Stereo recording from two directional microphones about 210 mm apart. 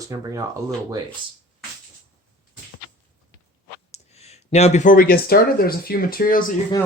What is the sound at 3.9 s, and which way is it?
Speech, 30° left (ahead or behind).